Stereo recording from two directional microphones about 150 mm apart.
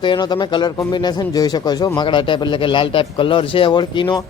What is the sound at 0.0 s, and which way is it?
A man's voice, 30° left (ahead or behind).